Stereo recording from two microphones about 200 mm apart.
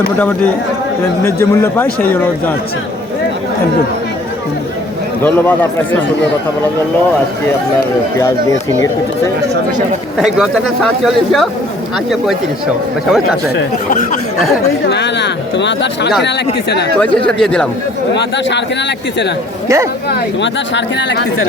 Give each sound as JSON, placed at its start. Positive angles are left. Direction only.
{"t": 1.2, "sound": "speech", "side_deg": 10}
{"t": 5.2, "sound": "speech", "side_deg": 10}
{"t": 8.4, "sound": "speech", "side_deg": 15}
{"t": 10.2, "sound": "speech", "side_deg": -5}
{"t": 14.8, "sound": "speech", "side_deg": 60}
{"t": 17.2, "sound": "speech", "side_deg": 5}
{"t": 18.1, "sound": "speech", "side_deg": 60}
{"t": 19.6, "sound": "speech", "side_deg": -15}
{"t": 20.1, "sound": "speech", "side_deg": 60}